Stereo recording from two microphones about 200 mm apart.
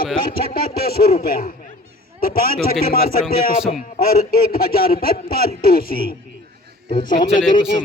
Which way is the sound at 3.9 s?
45° left (ahead or behind).